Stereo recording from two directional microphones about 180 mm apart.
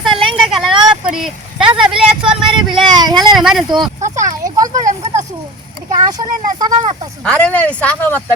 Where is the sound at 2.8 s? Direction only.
25° right (ahead or behind).